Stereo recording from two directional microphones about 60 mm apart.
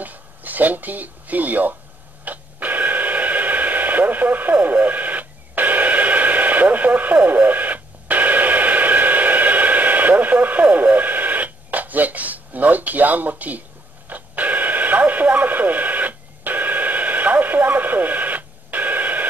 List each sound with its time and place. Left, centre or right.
0.0 s speech: right
2.2 s radio: right